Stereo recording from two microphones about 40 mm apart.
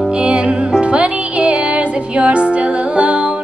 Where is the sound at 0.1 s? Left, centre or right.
Right.